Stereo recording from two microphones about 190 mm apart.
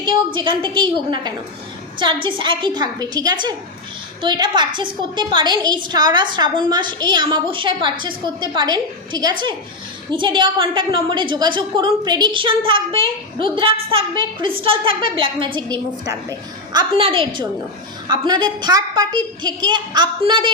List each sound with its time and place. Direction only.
0.3 s a woman's voice: 25° right (ahead or behind)